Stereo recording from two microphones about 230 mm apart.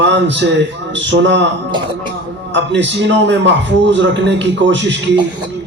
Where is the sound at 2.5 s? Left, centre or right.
Right.